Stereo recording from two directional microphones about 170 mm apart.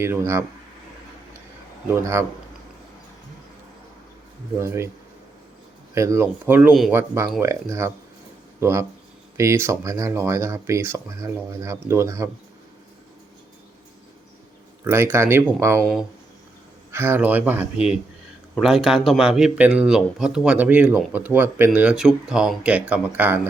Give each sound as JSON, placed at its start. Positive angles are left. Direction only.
{"t": 0.0, "sound": "speech", "side_deg": -15}
{"t": 1.9, "sound": "speech", "side_deg": -15}
{"t": 4.5, "sound": "speech", "side_deg": -15}
{"t": 5.9, "sound": "speech", "side_deg": -15}
{"t": 14.8, "sound": "speech", "side_deg": -15}
{"t": 16.9, "sound": "speech", "side_deg": -15}